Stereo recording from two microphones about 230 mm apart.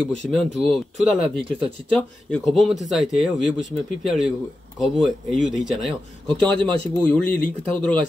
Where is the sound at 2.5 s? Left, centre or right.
Centre.